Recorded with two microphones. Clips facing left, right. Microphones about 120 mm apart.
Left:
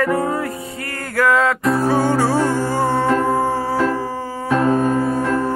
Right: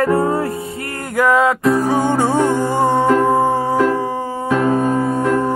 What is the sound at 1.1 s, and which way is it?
Music, 20° right (ahead or behind).